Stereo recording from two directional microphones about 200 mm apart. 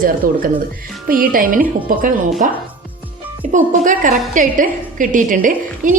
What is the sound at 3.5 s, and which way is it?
A woman's voice, 40° right (ahead or behind).